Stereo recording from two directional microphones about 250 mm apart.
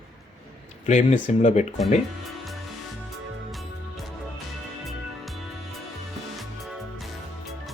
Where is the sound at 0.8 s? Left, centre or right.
Left.